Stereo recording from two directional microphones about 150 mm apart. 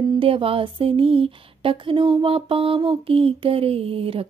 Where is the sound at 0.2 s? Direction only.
35° right (ahead or behind).